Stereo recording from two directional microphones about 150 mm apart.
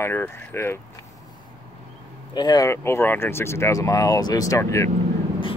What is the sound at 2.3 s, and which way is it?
Speech, 25° left (ahead or behind).